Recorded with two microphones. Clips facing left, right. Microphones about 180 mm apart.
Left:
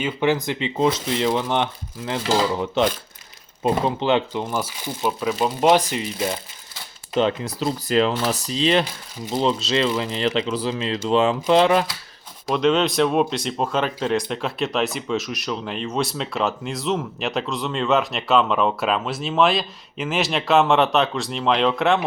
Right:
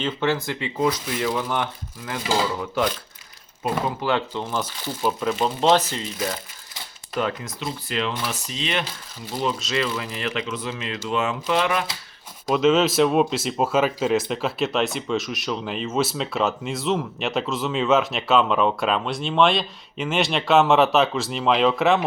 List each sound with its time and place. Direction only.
0.0 s speech: 15° left (ahead or behind)
3.6 s speech: 25° left (ahead or behind)
7.1 s speech: 25° left (ahead or behind)
7.6 s speech: 40° left (ahead or behind)
12.5 s speech: centre (ahead or behind)